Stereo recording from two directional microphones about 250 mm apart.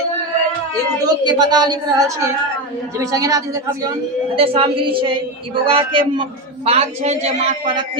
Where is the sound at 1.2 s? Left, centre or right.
Centre.